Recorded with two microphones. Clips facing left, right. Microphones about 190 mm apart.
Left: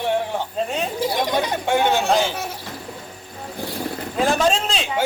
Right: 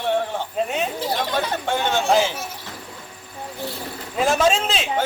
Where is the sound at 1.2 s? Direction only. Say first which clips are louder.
Left 2 dB; 15° left (ahead or behind).